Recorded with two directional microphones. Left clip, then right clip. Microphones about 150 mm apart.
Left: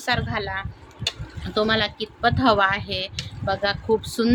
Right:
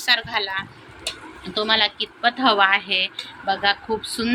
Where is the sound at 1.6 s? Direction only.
60° left (ahead or behind).